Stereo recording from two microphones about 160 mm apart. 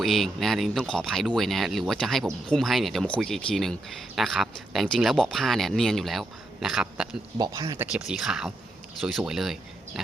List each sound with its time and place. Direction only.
0.0 s speech: centre (ahead or behind)
7.3 s speech: 25° right (ahead or behind)
7.9 s speech: 5° right (ahead or behind)